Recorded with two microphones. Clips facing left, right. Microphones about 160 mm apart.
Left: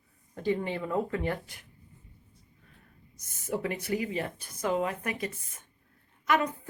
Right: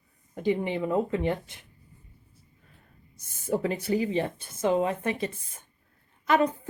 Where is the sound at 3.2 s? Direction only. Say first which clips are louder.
Right 5 dB; 30° right (ahead or behind).